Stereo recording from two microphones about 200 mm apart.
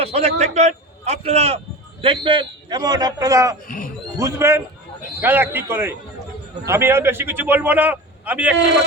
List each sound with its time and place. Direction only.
0.0 s a man's voice: 35° right (ahead or behind); by 3.6 s 15° right (ahead or behind)
3.7 s speech: 45° left (ahead or behind)
4.2 s a man's voice: 15° right (ahead or behind)